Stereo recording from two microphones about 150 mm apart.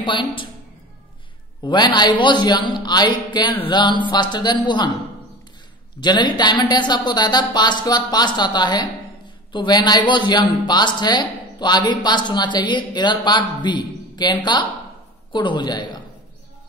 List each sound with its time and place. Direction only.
0.0 s a woman's voice: 30° left (ahead or behind)
1.6 s speech: 30° left (ahead or behind)
5.9 s speech: 30° left (ahead or behind)